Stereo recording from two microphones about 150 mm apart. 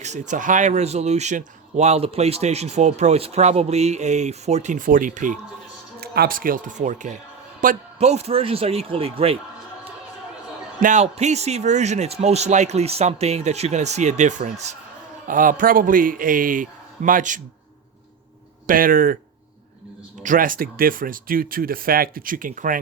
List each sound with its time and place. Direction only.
0.0 s speech: 55° right (ahead or behind)
6.0 s speech: 80° right; by 7.2 s 55° right (ahead or behind)
7.6 s a man's voice: 65° right (ahead or behind)
7.9 s a man's voice: 45° right (ahead or behind)
10.8 s a man's voice: 55° right (ahead or behind)
18.6 s speech: 65° right (ahead or behind)
20.2 s speech: 65° right (ahead or behind)